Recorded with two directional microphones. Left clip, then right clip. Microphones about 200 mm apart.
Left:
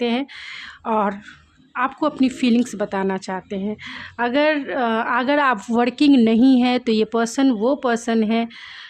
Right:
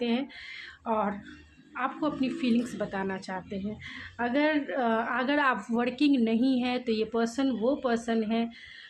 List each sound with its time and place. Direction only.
0.0 s a woman's voice: 45° left (ahead or behind)